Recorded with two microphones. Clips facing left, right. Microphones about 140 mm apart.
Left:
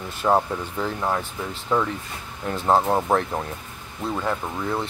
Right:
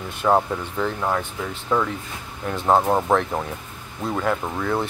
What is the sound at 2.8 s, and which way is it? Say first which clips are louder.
Speech: right 2 dB; 10° right (ahead or behind).